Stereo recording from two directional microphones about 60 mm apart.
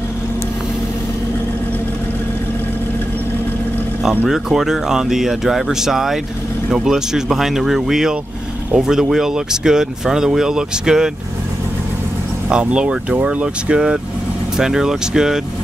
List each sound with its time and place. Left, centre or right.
4.3 s speech: centre
12.4 s speech: centre